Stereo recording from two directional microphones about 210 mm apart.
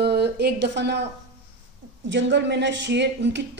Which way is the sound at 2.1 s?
55° right (ahead or behind).